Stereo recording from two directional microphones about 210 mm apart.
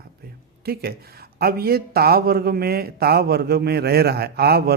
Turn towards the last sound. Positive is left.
turn(degrees=-50)  # may be behind; listen again after turning